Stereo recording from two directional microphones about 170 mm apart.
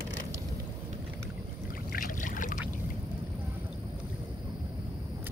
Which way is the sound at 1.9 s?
55° left (ahead or behind).